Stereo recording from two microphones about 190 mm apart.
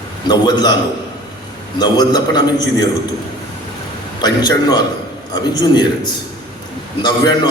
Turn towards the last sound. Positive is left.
turn(degrees=20)  # may be behind; listen again after turning